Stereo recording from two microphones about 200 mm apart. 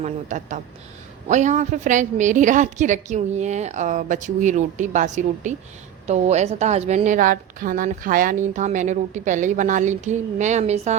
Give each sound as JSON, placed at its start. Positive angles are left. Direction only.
{"t": 0.0, "sound": "a woman's voice", "side_deg": -35}